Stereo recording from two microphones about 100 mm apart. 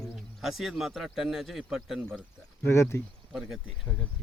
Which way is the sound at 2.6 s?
30° left (ahead or behind).